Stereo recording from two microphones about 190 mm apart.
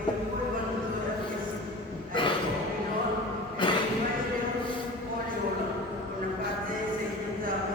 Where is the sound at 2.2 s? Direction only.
25° left (ahead or behind).